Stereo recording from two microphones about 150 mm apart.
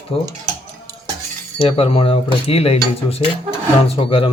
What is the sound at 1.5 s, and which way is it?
Speech, 40° left (ahead or behind).